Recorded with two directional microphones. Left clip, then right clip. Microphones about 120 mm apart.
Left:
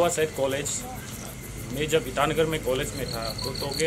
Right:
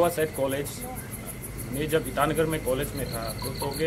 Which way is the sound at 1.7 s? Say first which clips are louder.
Left 1 dB; 5° left (ahead or behind).